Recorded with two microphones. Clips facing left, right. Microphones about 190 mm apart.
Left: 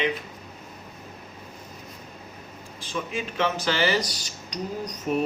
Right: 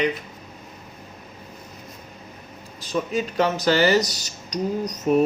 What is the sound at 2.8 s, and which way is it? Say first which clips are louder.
Speech: right 6 dB; 40° right (ahead or behind).